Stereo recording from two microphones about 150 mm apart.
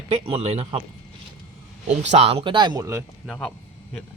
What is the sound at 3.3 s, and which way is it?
Speech, 10° left (ahead or behind).